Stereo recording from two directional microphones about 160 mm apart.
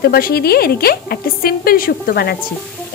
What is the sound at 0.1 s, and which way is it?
A woman's voice, 70° left (ahead or behind).